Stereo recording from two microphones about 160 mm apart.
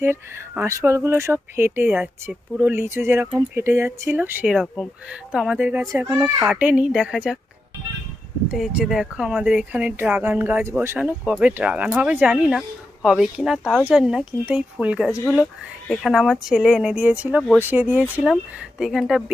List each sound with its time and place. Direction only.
0.0 s speech: 15° right (ahead or behind)
5.9 s speech: 20° right (ahead or behind)
6.4 s speech: 10° right (ahead or behind)
8.4 s speech: 5° right (ahead or behind)
15.1 s speech: 15° left (ahead or behind)
15.9 s speech: centre (ahead or behind)